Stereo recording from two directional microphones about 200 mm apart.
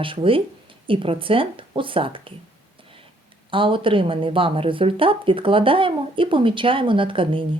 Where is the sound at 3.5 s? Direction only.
25° right (ahead or behind).